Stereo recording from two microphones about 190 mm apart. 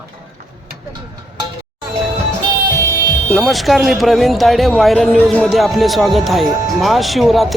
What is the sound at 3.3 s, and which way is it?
Speech, centre (ahead or behind).